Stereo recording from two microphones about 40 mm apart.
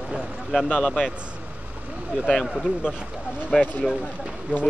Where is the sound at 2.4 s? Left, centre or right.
Centre.